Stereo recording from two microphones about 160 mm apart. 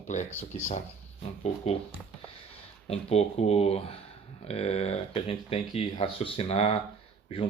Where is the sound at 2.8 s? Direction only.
40° left (ahead or behind).